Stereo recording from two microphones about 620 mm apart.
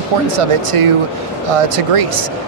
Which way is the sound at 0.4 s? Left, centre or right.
Right.